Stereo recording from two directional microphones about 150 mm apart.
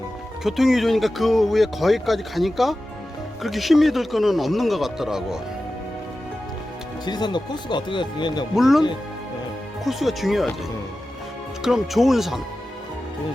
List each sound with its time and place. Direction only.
0.4 s speech: centre (ahead or behind)
7.0 s speech: 30° left (ahead or behind)
8.5 s speech: centre (ahead or behind)
9.8 s speech: centre (ahead or behind)
11.6 s speech: centre (ahead or behind)